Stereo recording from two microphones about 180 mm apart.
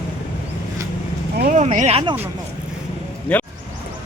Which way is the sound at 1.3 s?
60° right (ahead or behind).